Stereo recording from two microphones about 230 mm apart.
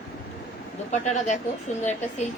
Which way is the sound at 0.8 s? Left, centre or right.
Left.